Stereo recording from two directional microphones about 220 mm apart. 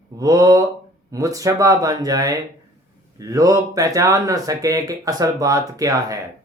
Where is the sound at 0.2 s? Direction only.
15° right (ahead or behind).